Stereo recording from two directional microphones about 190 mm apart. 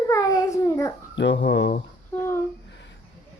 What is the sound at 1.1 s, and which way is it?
Speech, 70° left (ahead or behind).